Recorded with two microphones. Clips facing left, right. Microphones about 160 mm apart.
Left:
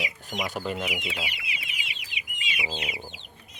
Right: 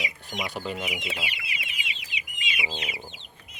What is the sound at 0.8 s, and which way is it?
Chicken, centre (ahead or behind).